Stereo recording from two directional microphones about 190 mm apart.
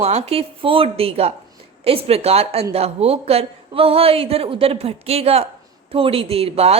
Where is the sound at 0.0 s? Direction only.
30° right (ahead or behind).